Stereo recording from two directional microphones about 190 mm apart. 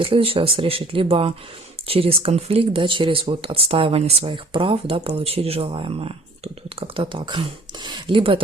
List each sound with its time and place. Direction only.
0.0 s speech: 30° right (ahead or behind)